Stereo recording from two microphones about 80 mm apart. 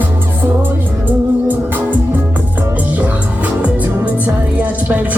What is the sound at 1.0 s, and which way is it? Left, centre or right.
Music, right.